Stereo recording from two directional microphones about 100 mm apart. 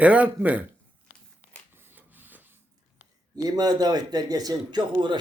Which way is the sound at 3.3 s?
40° right (ahead or behind).